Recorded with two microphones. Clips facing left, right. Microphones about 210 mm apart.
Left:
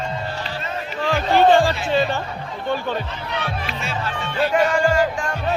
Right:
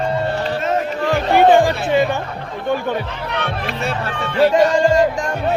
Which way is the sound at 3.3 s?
60° right (ahead or behind).